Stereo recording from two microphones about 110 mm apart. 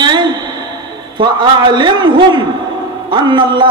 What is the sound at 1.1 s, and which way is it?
A man's voice, 45° right (ahead or behind).